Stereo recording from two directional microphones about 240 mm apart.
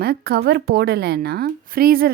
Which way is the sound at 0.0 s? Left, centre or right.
Right.